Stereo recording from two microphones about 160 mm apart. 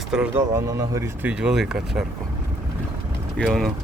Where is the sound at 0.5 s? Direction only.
20° right (ahead or behind).